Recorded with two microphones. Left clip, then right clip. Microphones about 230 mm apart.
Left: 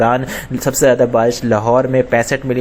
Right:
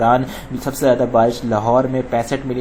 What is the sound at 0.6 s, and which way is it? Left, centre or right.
Speech, left.